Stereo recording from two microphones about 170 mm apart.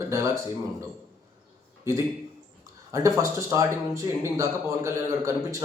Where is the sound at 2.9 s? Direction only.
15° right (ahead or behind).